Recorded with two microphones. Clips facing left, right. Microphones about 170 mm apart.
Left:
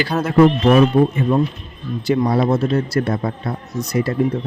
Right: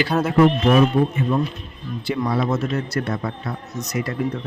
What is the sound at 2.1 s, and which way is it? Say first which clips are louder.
Speech: left 5 dB; 35° left (ahead or behind).